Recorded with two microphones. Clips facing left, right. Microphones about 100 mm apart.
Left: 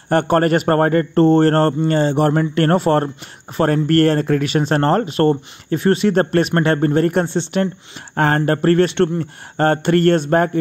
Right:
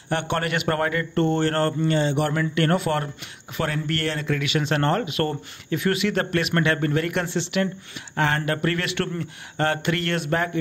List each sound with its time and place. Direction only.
0.1 s speech: 45° left (ahead or behind)